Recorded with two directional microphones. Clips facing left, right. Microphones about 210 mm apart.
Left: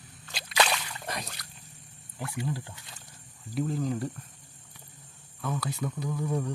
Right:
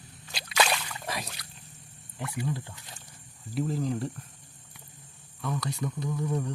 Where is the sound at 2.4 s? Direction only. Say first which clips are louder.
Right 1 dB; centre (ahead or behind).